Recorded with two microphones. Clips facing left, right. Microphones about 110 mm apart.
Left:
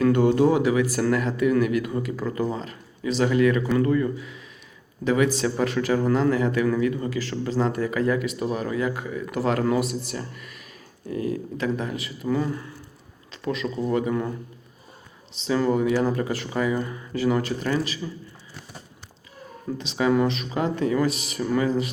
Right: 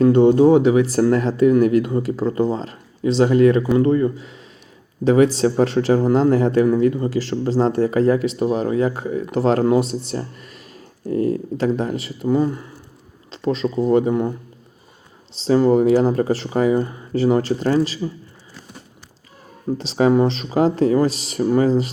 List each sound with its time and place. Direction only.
0.0 s speech: 25° right (ahead or behind)
15.4 s speech: 30° right (ahead or behind)
19.8 s speech: 35° right (ahead or behind)